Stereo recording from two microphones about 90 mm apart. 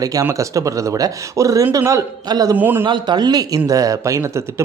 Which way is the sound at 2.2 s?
45° right (ahead or behind).